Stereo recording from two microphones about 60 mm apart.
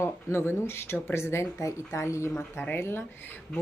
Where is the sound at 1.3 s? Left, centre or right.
Left.